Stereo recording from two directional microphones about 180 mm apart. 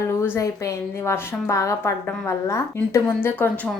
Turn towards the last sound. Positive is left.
turn(degrees=10)  # may be behind; listen again after turning